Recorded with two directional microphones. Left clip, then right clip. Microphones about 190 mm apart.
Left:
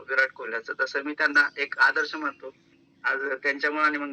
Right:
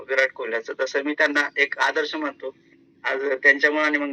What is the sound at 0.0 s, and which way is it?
A man's voice, 15° right (ahead or behind).